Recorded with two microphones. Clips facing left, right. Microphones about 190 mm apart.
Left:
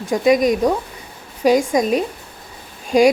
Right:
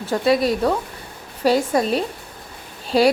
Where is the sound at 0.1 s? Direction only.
15° left (ahead or behind).